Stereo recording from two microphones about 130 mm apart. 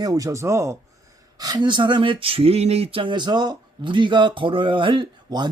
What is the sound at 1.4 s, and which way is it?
Speech, 35° right (ahead or behind).